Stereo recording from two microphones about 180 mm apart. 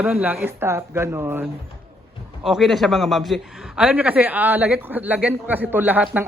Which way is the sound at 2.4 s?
Centre (ahead or behind).